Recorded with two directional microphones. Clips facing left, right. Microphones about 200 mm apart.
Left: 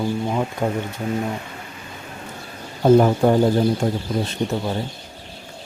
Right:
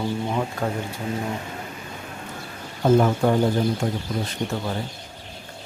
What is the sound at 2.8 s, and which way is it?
Speech, 35° left (ahead or behind).